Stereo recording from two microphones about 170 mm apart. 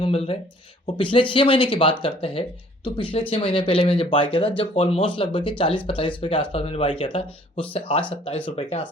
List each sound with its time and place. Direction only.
0.0 s speech: 35° left (ahead or behind)